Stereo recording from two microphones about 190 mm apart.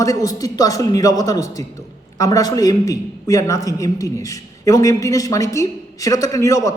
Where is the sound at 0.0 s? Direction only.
15° left (ahead or behind).